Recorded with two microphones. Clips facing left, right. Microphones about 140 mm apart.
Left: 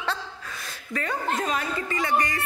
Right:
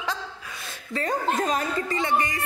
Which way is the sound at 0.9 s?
35° right (ahead or behind).